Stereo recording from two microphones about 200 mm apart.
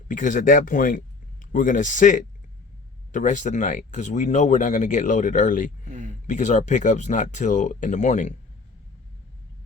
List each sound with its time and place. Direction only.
0.1 s speech: 40° left (ahead or behind)